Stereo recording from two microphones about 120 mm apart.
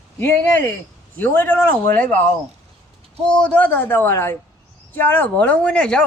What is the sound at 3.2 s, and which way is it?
Speech, 10° left (ahead or behind).